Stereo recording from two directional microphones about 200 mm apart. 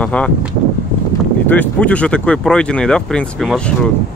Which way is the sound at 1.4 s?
10° left (ahead or behind).